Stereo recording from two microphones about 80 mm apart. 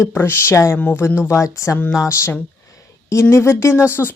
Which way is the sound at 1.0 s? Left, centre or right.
Left.